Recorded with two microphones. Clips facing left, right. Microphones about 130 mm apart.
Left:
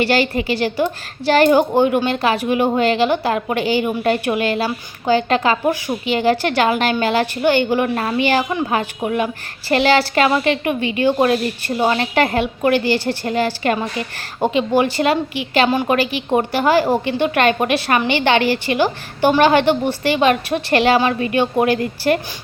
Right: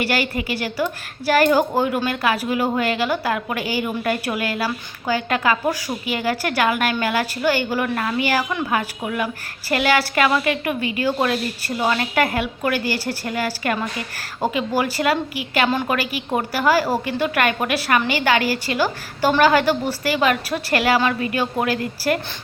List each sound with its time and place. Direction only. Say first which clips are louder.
0.0 s a woman's voice: left 5 dB; 25° left (ahead or behind)
15.7 s a woman's voice: left 5 dB; 15° left (ahead or behind)